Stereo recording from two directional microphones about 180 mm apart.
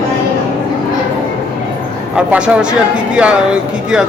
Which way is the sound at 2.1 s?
5° right (ahead or behind).